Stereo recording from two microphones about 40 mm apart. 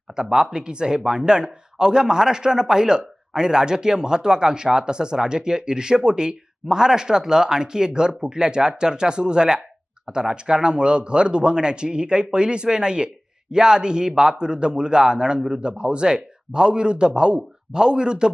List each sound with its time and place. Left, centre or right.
0.1 s speech: centre